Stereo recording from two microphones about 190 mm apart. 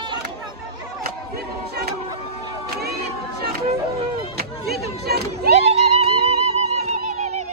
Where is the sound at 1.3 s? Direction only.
55° right (ahead or behind).